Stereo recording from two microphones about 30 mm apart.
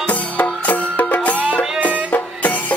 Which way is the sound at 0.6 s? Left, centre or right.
Left.